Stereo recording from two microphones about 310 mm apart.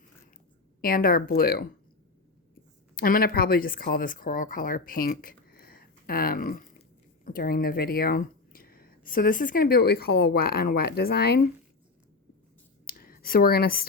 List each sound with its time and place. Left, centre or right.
0.8 s speech: left
2.9 s speech: left
12.8 s a sound: left